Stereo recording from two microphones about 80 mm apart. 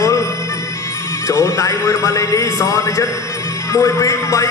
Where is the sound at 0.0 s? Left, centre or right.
Left.